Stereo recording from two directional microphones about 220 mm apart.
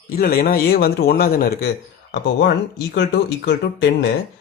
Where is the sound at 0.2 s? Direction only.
45° left (ahead or behind).